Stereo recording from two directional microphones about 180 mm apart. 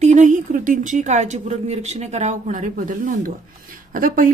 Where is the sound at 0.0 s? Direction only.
40° right (ahead or behind).